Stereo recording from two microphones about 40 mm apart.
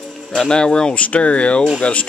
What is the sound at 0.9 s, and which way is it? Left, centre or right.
Speech, left.